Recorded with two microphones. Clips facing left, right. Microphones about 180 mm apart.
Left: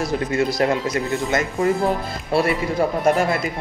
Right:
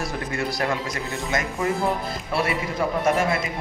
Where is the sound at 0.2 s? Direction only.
20° left (ahead or behind).